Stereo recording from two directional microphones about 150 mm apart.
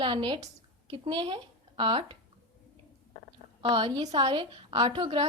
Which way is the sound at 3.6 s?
35° right (ahead or behind).